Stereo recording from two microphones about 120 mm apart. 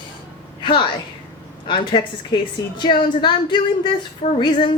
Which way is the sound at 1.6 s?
40° left (ahead or behind).